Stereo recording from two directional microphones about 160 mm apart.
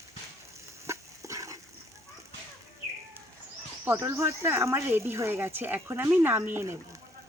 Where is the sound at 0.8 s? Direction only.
20° right (ahead or behind).